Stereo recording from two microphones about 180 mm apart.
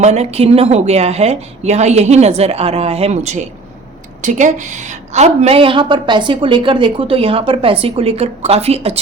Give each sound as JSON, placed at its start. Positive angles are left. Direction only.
{"t": 0.0, "sound": "a woman's voice", "side_deg": -35}